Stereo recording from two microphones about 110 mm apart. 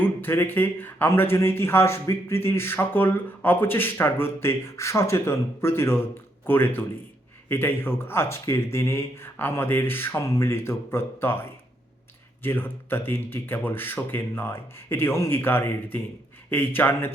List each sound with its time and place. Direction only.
0.0 s speech: 20° left (ahead or behind)
12.4 s speech: 20° left (ahead or behind)